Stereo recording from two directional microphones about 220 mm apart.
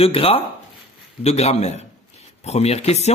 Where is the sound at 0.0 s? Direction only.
25° left (ahead or behind).